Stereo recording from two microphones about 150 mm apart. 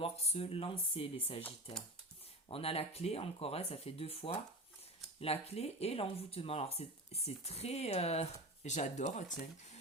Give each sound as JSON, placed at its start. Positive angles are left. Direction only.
{"t": 0.0, "sound": "speech", "side_deg": 40}
{"t": 2.5, "sound": "speech", "side_deg": 40}